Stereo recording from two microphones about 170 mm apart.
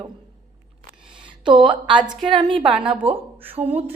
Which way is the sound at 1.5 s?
30° right (ahead or behind).